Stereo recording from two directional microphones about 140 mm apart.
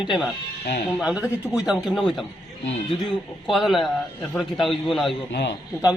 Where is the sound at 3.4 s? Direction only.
Centre (ahead or behind).